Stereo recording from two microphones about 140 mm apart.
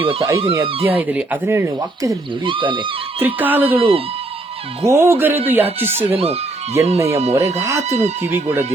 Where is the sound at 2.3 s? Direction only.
35° right (ahead or behind).